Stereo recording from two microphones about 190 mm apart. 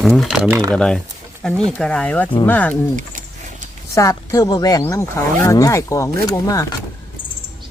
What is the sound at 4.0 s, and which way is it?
Speech, 15° left (ahead or behind).